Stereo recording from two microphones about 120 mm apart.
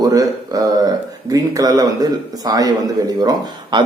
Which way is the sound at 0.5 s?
30° right (ahead or behind).